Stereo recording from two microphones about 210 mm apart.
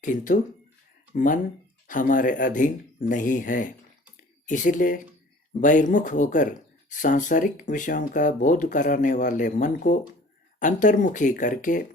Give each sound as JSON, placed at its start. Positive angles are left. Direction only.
{"t": 0.0, "sound": "speech", "side_deg": 40}
{"t": 4.2, "sound": "a sound", "side_deg": 40}
{"t": 5.5, "sound": "speech", "side_deg": 40}